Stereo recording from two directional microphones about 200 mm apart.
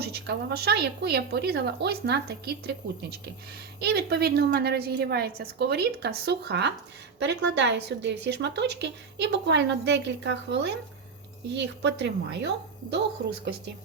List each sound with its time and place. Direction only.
0.0 s a woman's voice: 55° right (ahead or behind)